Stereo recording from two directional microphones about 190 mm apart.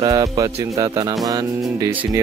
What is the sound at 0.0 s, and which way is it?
Speech, 20° right (ahead or behind).